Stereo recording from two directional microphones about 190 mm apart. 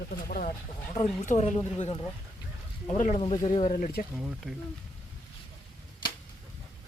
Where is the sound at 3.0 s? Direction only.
35° left (ahead or behind).